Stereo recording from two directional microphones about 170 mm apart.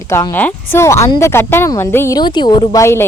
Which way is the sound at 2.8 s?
15° left (ahead or behind).